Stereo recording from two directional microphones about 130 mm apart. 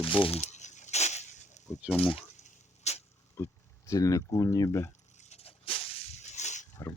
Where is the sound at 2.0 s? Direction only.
45° left (ahead or behind).